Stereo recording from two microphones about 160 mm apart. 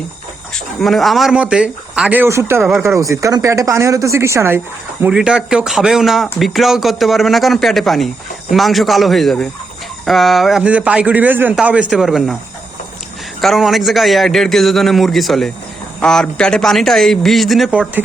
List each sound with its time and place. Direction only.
0.8 s a man's voice: centre (ahead or behind); by 4.6 s 15° right (ahead or behind)
5.0 s a man's voice: 5° right (ahead or behind)
13.4 s speech: centre (ahead or behind)